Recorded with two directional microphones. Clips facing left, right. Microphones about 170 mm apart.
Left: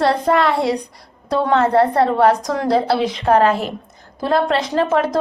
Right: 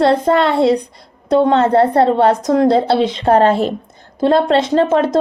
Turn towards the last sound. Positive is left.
turn(degrees=-25)  # may be behind; listen again after turning